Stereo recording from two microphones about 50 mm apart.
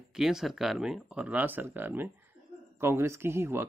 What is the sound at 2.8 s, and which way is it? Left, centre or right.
Speech, right.